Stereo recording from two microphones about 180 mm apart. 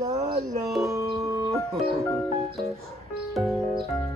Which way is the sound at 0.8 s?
15° right (ahead or behind).